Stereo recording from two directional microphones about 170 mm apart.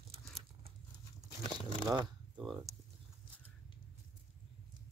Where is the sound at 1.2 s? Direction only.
30° left (ahead or behind).